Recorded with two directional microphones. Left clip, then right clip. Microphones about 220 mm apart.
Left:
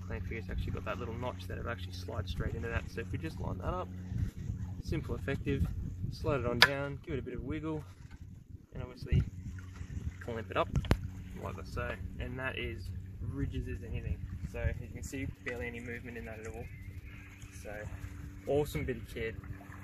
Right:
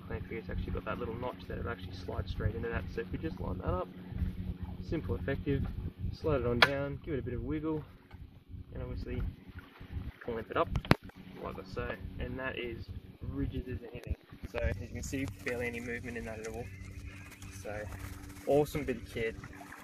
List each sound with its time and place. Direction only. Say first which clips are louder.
0.1 s speech: right 2 dB; 30° left (ahead or behind)
4.9 s speech: right 2 dB; 35° left (ahead or behind)
10.2 s speech: right 1 dB; 30° left (ahead or behind)
14.6 s speech: right 5 dB; centre (ahead or behind)
18.5 s speech: right 3 dB; 20° left (ahead or behind)